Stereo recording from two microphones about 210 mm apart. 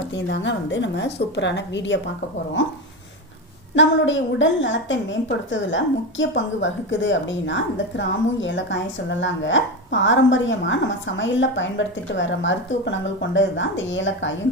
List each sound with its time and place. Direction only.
0.1 s a woman's voice: 60° left (ahead or behind)
3.8 s a woman's voice: 60° left (ahead or behind)